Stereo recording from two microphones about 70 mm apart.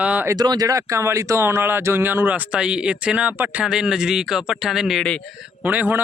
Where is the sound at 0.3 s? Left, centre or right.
Right.